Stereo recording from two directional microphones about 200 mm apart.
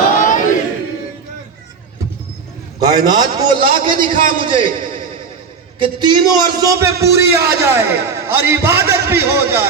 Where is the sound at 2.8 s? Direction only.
20° right (ahead or behind).